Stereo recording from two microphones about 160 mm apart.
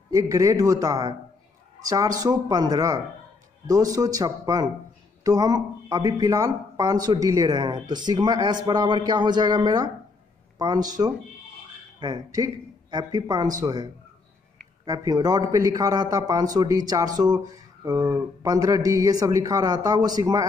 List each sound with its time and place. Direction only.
0.1 s speech: 20° right (ahead or behind)
14.9 s speech: 25° right (ahead or behind)